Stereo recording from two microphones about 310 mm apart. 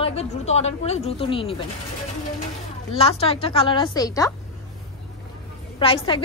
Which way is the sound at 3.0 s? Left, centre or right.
Centre.